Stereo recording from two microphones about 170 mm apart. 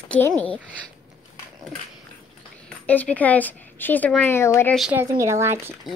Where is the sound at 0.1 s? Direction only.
10° left (ahead or behind).